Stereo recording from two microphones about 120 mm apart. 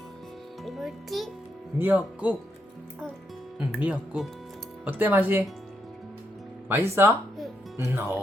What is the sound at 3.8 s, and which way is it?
Speech, 10° right (ahead or behind).